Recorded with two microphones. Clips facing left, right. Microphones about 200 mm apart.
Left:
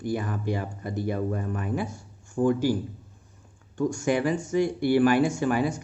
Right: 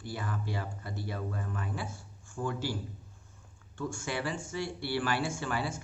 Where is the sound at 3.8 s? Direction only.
40° left (ahead or behind).